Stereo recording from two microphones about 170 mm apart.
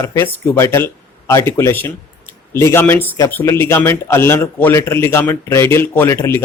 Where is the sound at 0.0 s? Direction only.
15° left (ahead or behind).